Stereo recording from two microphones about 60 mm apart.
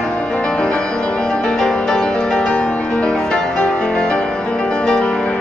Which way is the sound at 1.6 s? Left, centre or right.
Centre.